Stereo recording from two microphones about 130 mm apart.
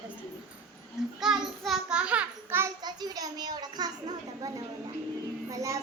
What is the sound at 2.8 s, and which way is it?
A child's voice, 30° right (ahead or behind).